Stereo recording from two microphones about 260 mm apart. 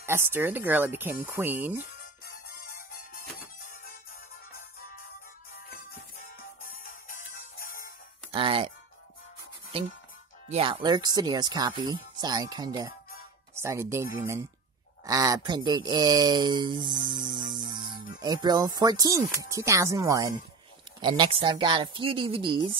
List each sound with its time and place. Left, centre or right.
0.0 s speech: centre
2.5 s music: left
6.6 s music: left
8.3 s speech: centre
10.5 s speech: right